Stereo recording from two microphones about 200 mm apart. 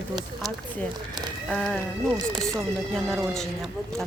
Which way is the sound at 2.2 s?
20° right (ahead or behind).